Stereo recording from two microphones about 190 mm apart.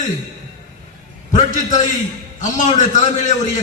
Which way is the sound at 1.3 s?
40° left (ahead or behind).